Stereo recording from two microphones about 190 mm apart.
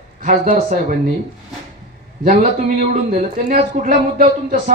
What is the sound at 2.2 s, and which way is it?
Speech, 50° right (ahead or behind).